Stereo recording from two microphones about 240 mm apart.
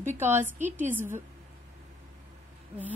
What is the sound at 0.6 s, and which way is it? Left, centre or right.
Speech, right.